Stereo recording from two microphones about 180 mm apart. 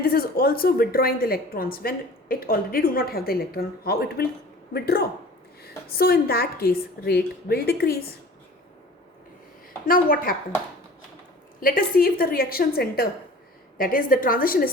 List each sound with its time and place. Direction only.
0.0 s a woman's voice: 55° left (ahead or behind)
9.8 s a woman's voice: 50° left (ahead or behind)
11.6 s a woman's voice: 55° left (ahead or behind)